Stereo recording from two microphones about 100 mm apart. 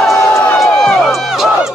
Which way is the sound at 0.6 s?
5° left (ahead or behind).